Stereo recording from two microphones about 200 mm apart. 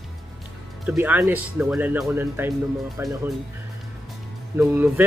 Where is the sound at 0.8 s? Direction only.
10° right (ahead or behind).